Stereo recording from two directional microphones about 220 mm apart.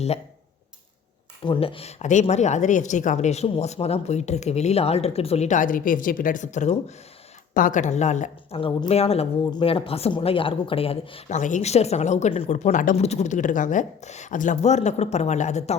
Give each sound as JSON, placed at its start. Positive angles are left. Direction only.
{"t": 1.5, "sound": "speech", "side_deg": 25}